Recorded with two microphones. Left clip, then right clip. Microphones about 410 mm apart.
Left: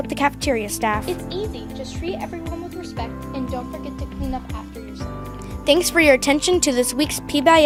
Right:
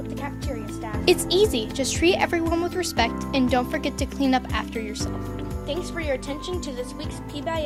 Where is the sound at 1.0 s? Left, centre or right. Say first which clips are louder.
Right 8 dB; right.